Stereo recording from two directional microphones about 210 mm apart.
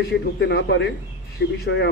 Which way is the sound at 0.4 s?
55° left (ahead or behind).